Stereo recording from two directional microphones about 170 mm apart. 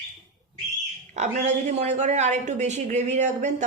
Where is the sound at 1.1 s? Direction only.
45° right (ahead or behind).